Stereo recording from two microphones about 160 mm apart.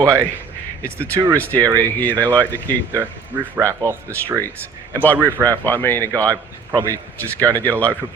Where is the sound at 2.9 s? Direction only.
10° right (ahead or behind).